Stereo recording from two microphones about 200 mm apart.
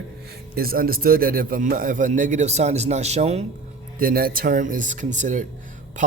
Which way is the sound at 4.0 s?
45° right (ahead or behind).